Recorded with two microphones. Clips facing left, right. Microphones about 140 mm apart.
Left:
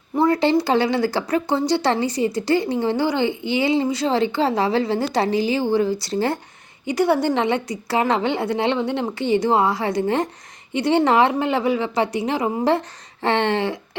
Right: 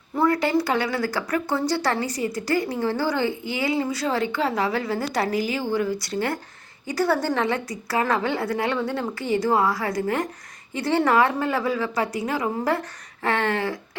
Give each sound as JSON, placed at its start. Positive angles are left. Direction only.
{"t": 0.2, "sound": "a woman's voice", "side_deg": 25}